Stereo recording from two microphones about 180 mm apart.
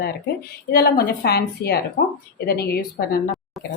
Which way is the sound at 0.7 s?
60° left (ahead or behind).